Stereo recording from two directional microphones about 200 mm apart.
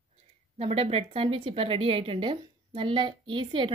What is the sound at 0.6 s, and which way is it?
A woman's voice, 30° right (ahead or behind).